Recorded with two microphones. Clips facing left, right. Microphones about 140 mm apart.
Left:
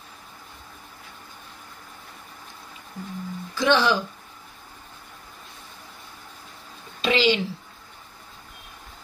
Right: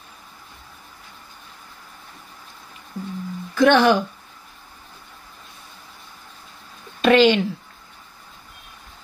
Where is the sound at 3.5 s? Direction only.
60° right (ahead or behind).